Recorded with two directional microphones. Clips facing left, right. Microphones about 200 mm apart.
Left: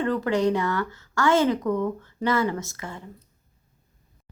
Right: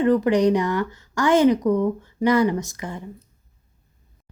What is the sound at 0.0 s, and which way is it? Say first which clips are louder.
Music: right 5 dB; 15° right (ahead or behind).